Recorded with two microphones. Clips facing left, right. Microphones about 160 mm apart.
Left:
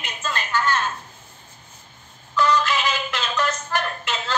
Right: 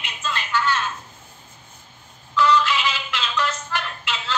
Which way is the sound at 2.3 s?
45° left (ahead or behind).